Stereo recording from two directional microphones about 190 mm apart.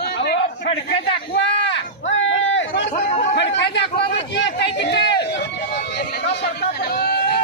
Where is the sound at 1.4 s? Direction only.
70° left (ahead or behind).